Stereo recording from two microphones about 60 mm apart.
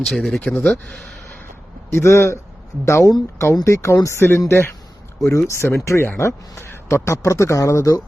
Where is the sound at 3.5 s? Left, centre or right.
Left.